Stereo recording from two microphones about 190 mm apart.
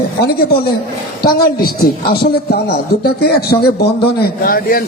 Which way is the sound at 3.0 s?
55° left (ahead or behind).